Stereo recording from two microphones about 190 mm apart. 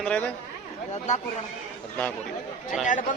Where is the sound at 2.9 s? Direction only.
45° left (ahead or behind).